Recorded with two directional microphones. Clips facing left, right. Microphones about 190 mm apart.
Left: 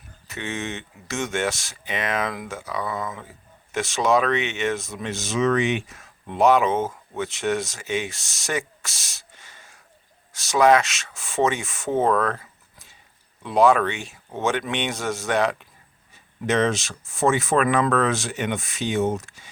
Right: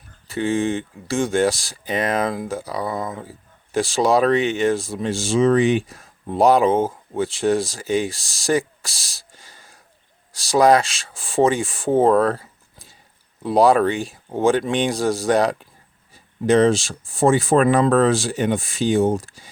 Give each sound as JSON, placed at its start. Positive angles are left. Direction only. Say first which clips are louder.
{"t": 0.3, "sound": "speech", "louder": "right 10 dB", "side_deg": -30}